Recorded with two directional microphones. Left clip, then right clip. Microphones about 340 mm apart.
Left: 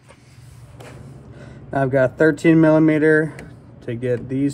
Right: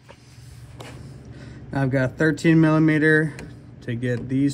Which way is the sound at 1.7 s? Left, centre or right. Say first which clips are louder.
Left 7 dB; centre.